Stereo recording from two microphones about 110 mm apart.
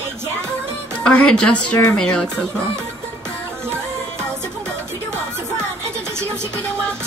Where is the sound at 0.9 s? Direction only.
10° left (ahead or behind).